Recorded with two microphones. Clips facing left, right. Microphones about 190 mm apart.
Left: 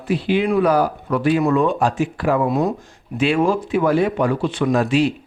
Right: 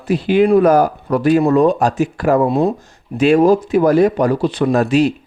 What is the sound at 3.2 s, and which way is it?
Speech, 40° right (ahead or behind).